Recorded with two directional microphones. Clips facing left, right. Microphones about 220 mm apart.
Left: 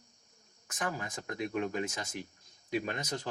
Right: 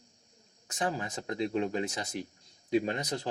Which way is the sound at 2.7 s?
30° right (ahead or behind).